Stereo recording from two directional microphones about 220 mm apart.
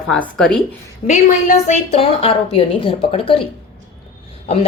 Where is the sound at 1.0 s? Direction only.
35° left (ahead or behind).